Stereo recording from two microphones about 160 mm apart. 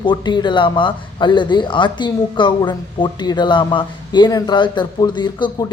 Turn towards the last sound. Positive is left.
turn(degrees=25)  # may be behind; listen again after turning